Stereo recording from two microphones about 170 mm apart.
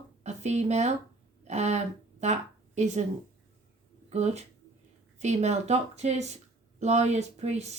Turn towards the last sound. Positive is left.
turn(degrees=-40)  # may be behind; listen again after turning